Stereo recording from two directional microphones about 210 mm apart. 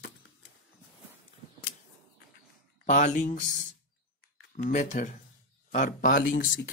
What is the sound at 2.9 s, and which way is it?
Speech, 35° left (ahead or behind).